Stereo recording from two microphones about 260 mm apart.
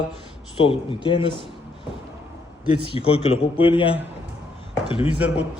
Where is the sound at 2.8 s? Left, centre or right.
Left.